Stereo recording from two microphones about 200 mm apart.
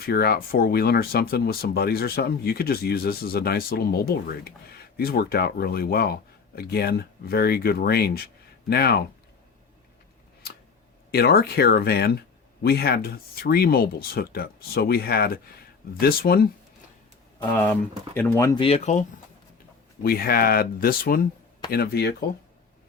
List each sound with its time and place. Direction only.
0.0 s speech: 50° left (ahead or behind)
11.1 s speech: 50° left (ahead or behind)
17.4 s speech: 10° left (ahead or behind)
18.6 s speech: 35° left (ahead or behind)
20.0 s speech: 50° left (ahead or behind)